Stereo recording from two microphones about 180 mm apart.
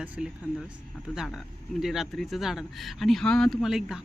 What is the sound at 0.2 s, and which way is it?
Speech, 5° right (ahead or behind).